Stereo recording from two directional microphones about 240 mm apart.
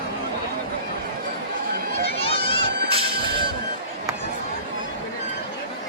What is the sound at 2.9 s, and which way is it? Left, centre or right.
Music, right.